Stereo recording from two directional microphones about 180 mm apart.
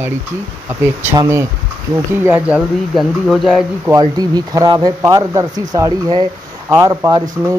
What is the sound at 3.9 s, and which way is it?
Speech, 20° right (ahead or behind).